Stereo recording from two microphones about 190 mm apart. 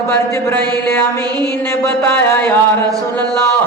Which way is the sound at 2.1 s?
10° left (ahead or behind).